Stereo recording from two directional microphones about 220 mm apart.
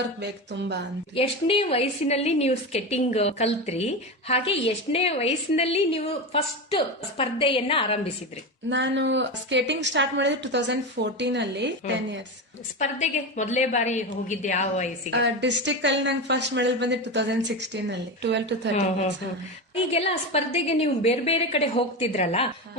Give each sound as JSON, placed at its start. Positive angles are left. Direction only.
{"t": 1.1, "sound": "a woman's voice", "side_deg": 25}
{"t": 8.7, "sound": "a woman's voice", "side_deg": -55}
{"t": 13.0, "sound": "a woman's voice", "side_deg": 35}
{"t": 15.1, "sound": "a woman's voice", "side_deg": -55}
{"t": 19.9, "sound": "a woman's voice", "side_deg": 25}